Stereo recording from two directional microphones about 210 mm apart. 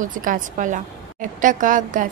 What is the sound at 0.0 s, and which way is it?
A woman's voice, 40° right (ahead or behind).